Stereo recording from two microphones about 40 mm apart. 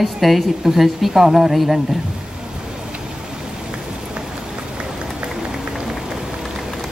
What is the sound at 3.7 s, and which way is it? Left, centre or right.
Rain on surface, right.